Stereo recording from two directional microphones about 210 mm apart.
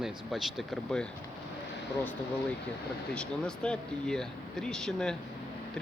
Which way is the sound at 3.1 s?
5° left (ahead or behind).